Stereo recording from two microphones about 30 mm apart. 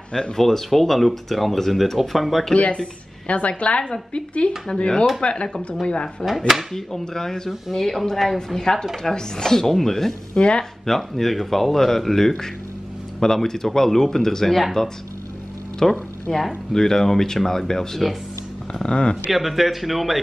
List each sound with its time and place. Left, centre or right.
0.4 s speech: centre
2.5 s a woman's voice: left
4.7 s speech: left
6.2 s speech: centre
6.9 s speech: centre
10.3 s speech: left
10.9 s speech: centre
15.8 s speech: centre
18.7 s speech: left
19.3 s speech: centre